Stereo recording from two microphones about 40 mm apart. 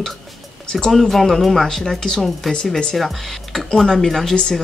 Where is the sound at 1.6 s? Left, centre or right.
Centre.